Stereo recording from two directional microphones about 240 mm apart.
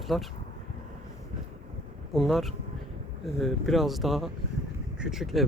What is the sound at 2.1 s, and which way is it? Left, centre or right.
Speech, centre.